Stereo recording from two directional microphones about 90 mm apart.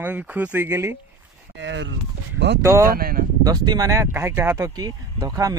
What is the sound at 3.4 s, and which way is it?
Speech, 50° right (ahead or behind).